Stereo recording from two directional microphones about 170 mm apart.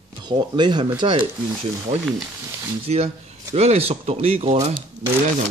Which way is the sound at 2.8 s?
40° right (ahead or behind).